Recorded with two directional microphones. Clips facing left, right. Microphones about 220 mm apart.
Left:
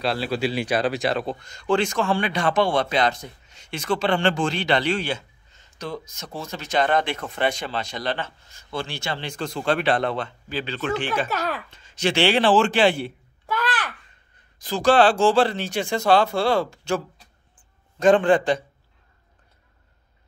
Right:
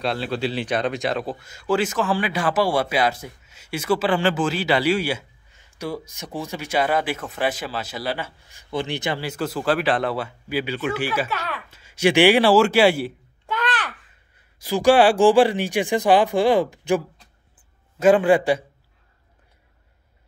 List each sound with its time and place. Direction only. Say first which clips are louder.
0.0 s speech: even; 5° left (ahead or behind); by 9.2 s 20° right (ahead or behind)
9.2 s speech: right 3 dB; 5° right (ahead or behind)
11.2 s speech: left 3 dB; 40° left (ahead or behind)
11.7 s a man's voice: right 8 dB; 10° right (ahead or behind)